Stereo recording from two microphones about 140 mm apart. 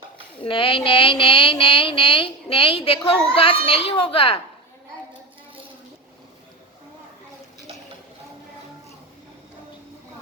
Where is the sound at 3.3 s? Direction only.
40° left (ahead or behind).